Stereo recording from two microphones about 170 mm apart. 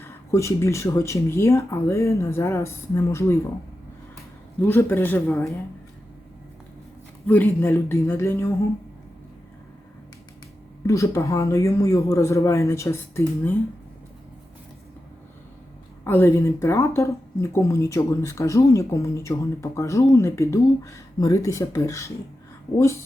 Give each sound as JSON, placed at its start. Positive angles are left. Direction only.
{"t": 0.0, "sound": "speech", "side_deg": 15}
{"t": 4.6, "sound": "speech", "side_deg": 10}
{"t": 7.3, "sound": "speech", "side_deg": 10}
{"t": 10.8, "sound": "speech", "side_deg": 15}
{"t": 16.0, "sound": "speech", "side_deg": 15}